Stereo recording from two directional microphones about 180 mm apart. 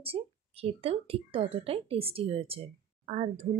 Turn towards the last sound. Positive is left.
turn(degrees=-35)  # may be behind; listen again after turning